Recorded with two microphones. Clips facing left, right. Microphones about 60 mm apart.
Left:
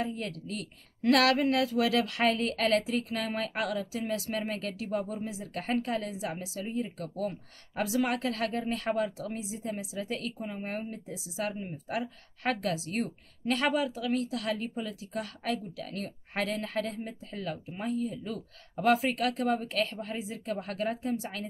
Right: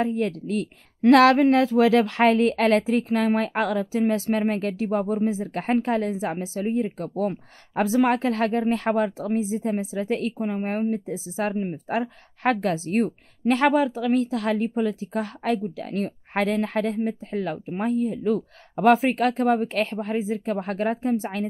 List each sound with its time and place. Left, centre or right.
0.0 s a woman's voice: right